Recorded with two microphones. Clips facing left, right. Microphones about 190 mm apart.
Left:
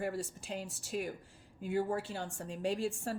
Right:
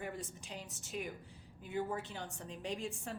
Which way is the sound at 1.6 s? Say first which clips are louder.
Left 5 dB; 90° left.